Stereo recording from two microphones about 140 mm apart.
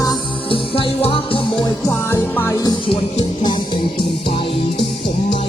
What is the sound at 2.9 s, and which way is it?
Music, 35° left (ahead or behind).